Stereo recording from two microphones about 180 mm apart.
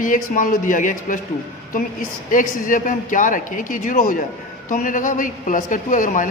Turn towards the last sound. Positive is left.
turn(degrees=45)  # may be behind; listen again after turning